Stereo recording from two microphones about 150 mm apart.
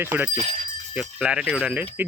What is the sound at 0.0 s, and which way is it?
Speech, 15° right (ahead or behind).